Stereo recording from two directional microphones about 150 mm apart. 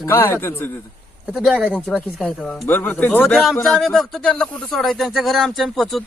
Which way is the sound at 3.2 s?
Centre (ahead or behind).